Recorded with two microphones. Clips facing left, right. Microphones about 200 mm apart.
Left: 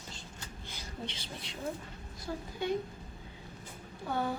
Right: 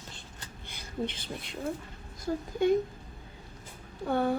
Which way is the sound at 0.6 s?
55° right (ahead or behind).